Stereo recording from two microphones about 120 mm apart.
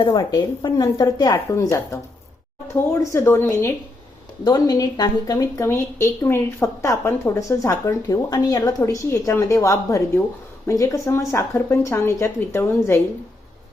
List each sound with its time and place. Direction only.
0.3 s speech: 35° left (ahead or behind)
3.1 s speech: 20° left (ahead or behind)
4.4 s speech: 30° left (ahead or behind)